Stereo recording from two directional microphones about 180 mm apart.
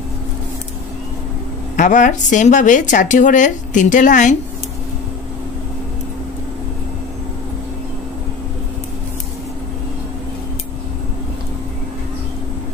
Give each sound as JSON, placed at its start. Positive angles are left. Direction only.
{"t": 1.8, "sound": "a woman's voice", "side_deg": 45}